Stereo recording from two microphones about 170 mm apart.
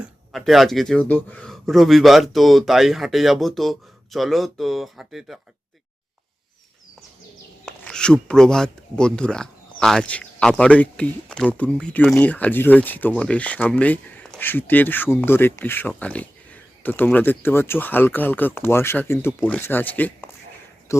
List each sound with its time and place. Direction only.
0.0 s speech: centre (ahead or behind)
7.6 s speech: 5° left (ahead or behind)